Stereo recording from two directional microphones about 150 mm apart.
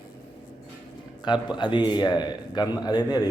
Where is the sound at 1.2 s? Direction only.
30° left (ahead or behind).